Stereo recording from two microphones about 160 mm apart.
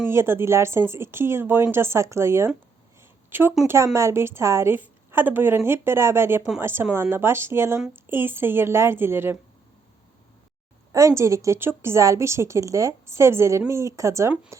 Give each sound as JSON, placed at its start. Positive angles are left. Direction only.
{"t": 0.1, "sound": "a woman's voice", "side_deg": -15}
{"t": 10.9, "sound": "a woman's voice", "side_deg": -20}